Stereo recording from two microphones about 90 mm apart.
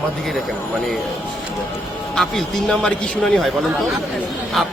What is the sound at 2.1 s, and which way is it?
Speech, 5° left (ahead or behind).